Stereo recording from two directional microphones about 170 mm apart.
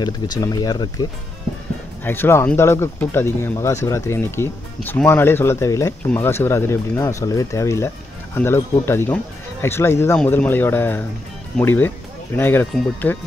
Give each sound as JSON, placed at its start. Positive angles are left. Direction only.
{"t": 0.0, "sound": "speech", "side_deg": 25}
{"t": 2.0, "sound": "speech", "side_deg": 10}